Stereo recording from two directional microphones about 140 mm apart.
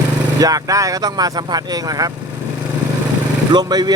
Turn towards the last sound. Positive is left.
turn(degrees=-30)  # may be behind; listen again after turning